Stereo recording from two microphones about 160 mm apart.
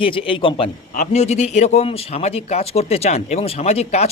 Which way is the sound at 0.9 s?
50° left (ahead or behind).